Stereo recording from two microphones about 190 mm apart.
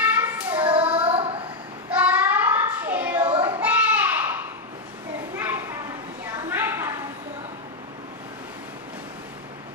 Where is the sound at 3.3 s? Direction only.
25° right (ahead or behind).